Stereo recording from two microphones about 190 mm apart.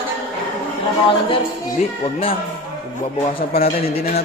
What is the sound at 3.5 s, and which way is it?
Speech, 50° left (ahead or behind).